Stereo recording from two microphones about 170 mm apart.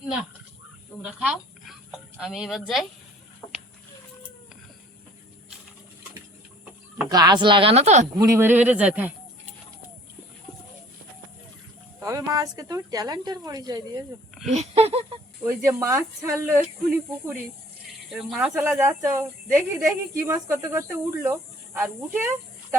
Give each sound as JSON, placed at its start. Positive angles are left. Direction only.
{"t": 1.2, "sound": "speech", "side_deg": -5}
{"t": 7.1, "sound": "speech", "side_deg": -25}
{"t": 8.1, "sound": "speech", "side_deg": -20}
{"t": 11.9, "sound": "speech", "side_deg": -20}
{"t": 14.5, "sound": "a sound", "side_deg": -40}
{"t": 15.6, "sound": "speech", "side_deg": -20}
{"t": 18.1, "sound": "speech", "side_deg": -5}
{"t": 18.8, "sound": "speech", "side_deg": -15}